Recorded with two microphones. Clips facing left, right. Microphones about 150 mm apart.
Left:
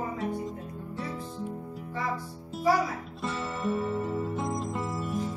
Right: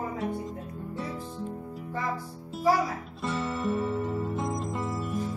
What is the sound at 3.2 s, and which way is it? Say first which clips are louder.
Music: right 2 dB; centre (ahead or behind).